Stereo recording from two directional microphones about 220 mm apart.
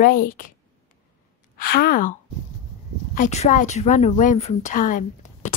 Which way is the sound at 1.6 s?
45° left (ahead or behind).